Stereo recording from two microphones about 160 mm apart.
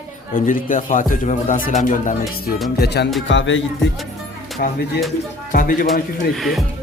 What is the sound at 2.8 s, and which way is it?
Music, 90° left.